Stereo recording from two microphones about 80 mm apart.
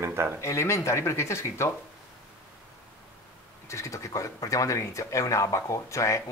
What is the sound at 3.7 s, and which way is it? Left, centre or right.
Speech, left.